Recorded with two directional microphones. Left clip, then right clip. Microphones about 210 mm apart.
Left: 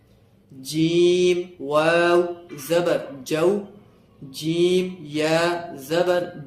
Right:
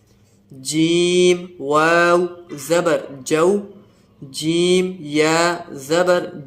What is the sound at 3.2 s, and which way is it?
Mantra, 25° right (ahead or behind).